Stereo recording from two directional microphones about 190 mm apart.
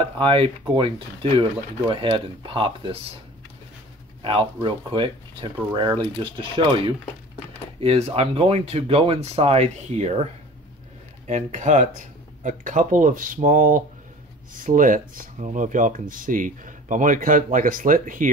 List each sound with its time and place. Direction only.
0.2 s speech: 30° right (ahead or behind)
4.2 s speech: 25° right (ahead or behind)
11.2 s speech: 40° right (ahead or behind)